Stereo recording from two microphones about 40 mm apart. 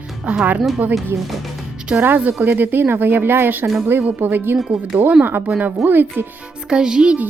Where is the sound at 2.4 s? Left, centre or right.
Right.